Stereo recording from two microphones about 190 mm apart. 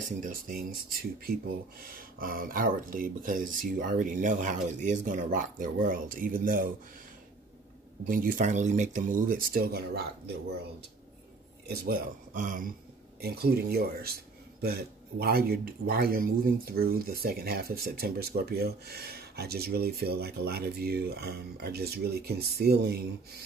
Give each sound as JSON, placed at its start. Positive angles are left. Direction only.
{"t": 0.2, "sound": "speech", "side_deg": -50}
{"t": 8.1, "sound": "speech", "side_deg": -45}
{"t": 11.6, "sound": "speech", "side_deg": -55}
{"t": 13.2, "sound": "speech", "side_deg": -55}